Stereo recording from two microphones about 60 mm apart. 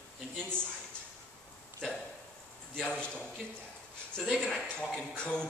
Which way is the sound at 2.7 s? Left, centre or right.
Centre.